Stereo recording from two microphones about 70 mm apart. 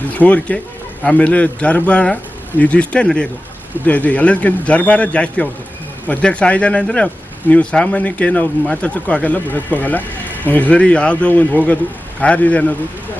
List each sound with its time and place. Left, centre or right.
0.1 s a man's voice: left